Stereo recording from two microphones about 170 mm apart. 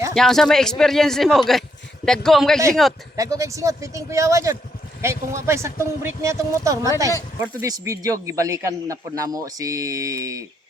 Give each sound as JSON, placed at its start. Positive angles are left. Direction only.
{"t": 0.1, "sound": "a man's voice", "side_deg": 0}
{"t": 3.2, "sound": "speech", "side_deg": -20}